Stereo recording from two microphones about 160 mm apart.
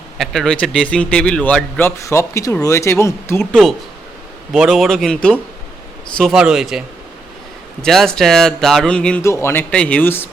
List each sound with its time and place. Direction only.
0.2 s a man's voice: 5° left (ahead or behind)
3.5 s a man's voice: centre (ahead or behind)
9.2 s speech: 15° left (ahead or behind)